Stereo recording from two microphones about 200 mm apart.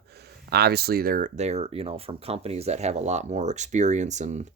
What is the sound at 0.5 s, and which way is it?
Speech, 50° right (ahead or behind).